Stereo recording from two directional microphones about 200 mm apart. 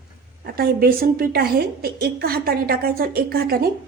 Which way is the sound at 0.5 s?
50° right (ahead or behind).